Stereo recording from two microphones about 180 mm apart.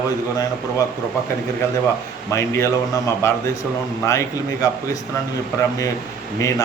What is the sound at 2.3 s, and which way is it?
A man's voice, 15° left (ahead or behind).